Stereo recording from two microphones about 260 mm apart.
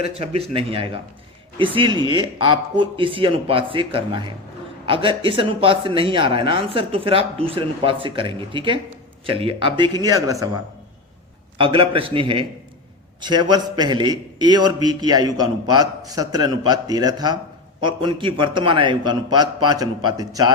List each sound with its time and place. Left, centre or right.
0.0 s speech: right
11.5 s a man's voice: centre